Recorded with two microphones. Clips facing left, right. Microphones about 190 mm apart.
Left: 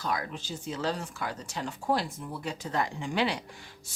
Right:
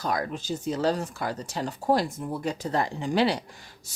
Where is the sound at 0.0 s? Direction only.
45° right (ahead or behind).